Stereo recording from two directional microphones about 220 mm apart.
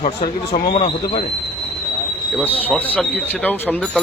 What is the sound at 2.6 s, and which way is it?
Speech, 10° left (ahead or behind).